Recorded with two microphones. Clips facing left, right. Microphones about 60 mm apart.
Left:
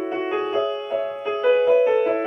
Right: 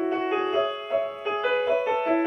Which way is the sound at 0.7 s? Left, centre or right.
Centre.